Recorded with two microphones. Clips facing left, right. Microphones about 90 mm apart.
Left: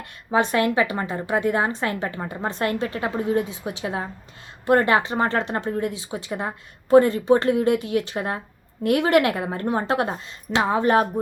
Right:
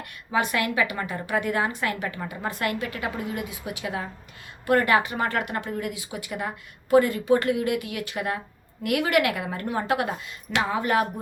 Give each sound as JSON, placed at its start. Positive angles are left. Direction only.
{"t": 0.0, "sound": "a woman's voice", "side_deg": 30}